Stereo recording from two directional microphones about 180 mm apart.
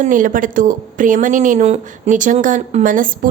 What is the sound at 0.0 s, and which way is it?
Speech, 50° right (ahead or behind).